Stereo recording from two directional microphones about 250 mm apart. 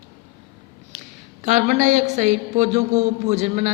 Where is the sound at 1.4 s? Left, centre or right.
Right.